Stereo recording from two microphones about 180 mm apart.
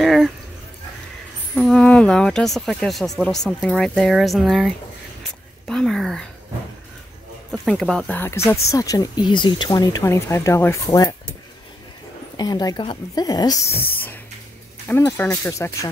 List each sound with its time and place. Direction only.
0.0 s a sound: centre (ahead or behind)
1.5 s speech: centre (ahead or behind)
7.5 s speech: centre (ahead or behind)
10.9 s cutlery: 20° left (ahead or behind)
12.4 s speech: 25° left (ahead or behind)
14.9 s speech: 15° left (ahead or behind)